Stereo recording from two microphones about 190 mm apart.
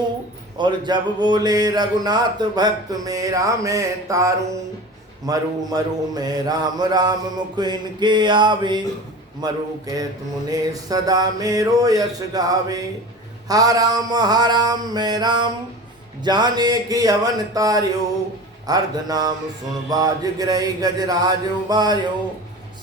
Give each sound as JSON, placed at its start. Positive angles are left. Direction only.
{"t": 0.6, "sound": "speech", "side_deg": -25}